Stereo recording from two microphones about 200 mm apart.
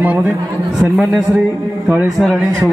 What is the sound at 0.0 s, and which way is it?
Speech, 5° right (ahead or behind).